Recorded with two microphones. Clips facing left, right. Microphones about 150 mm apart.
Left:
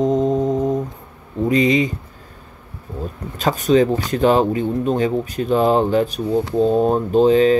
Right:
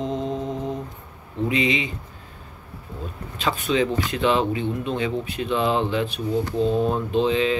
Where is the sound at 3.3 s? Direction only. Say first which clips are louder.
Left 7 dB; 40° left (ahead or behind).